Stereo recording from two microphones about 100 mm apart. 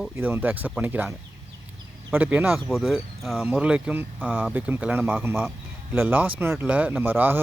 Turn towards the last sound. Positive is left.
turn(degrees=-20)  # may be behind; listen again after turning